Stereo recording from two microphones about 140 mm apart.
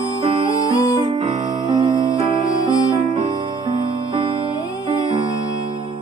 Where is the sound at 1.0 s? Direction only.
30° right (ahead or behind).